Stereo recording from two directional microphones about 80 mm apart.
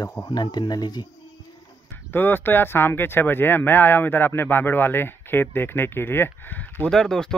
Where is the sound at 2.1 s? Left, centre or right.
Left.